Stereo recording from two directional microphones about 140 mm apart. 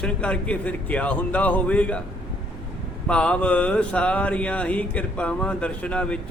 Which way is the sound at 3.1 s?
10° left (ahead or behind).